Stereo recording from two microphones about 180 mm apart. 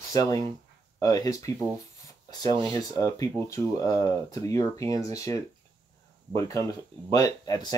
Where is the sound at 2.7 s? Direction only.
20° left (ahead or behind).